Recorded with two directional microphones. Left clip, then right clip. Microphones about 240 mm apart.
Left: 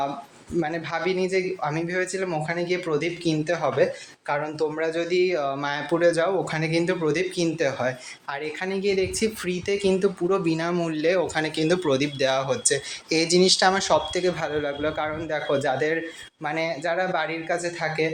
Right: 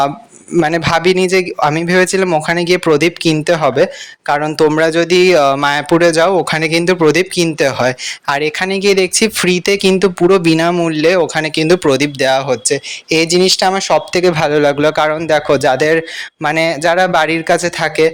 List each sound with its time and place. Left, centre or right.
0.6 s a man's voice: right